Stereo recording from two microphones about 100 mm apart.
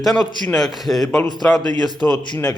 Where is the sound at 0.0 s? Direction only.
Centre (ahead or behind).